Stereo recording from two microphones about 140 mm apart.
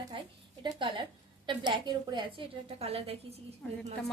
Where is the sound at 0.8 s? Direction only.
35° right (ahead or behind).